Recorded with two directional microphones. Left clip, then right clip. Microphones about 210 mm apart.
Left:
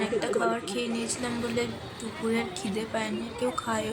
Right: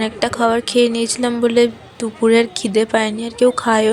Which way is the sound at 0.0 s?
40° right (ahead or behind).